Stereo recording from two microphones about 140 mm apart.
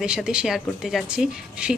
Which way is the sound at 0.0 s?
5° right (ahead or behind).